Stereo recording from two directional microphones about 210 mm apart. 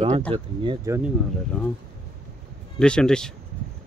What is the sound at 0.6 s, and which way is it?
Speech, 15° right (ahead or behind).